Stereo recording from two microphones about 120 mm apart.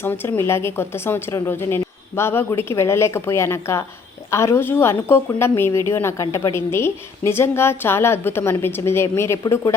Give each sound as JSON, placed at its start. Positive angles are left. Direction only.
{"t": 0.0, "sound": "a woman's voice", "side_deg": 20}